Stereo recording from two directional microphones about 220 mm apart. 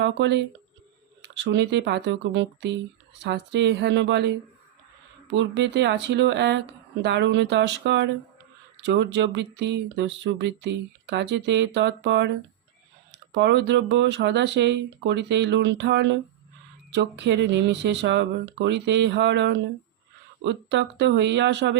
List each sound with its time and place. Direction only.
0.0 s speech: 55° right (ahead or behind)